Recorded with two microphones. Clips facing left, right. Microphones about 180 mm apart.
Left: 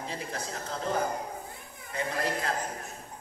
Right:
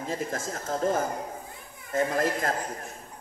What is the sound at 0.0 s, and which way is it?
A man's voice, 45° right (ahead or behind).